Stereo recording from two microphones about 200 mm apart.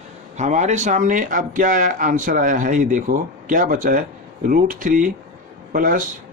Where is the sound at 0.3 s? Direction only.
35° right (ahead or behind).